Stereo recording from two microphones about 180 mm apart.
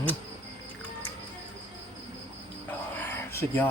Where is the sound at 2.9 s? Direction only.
10° left (ahead or behind).